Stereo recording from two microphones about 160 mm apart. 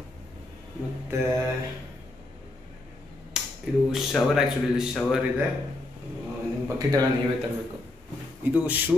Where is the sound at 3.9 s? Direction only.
Centre (ahead or behind).